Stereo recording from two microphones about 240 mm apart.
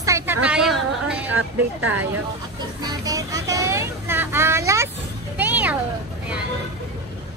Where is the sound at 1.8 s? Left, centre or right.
Right.